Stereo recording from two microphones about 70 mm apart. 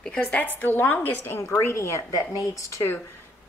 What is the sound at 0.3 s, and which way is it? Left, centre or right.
A woman's voice, left.